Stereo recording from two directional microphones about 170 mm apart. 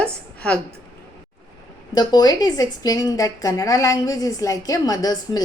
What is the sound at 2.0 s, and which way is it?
A woman's voice, 25° left (ahead or behind).